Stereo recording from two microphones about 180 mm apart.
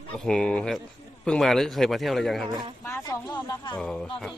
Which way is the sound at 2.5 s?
25° right (ahead or behind).